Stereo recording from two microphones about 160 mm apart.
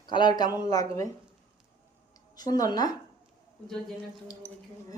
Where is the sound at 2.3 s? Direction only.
25° left (ahead or behind).